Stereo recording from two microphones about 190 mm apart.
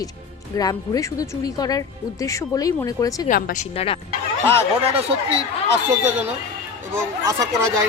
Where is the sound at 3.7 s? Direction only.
30° left (ahead or behind).